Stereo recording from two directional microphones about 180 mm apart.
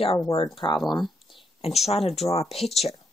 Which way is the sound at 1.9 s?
35° left (ahead or behind).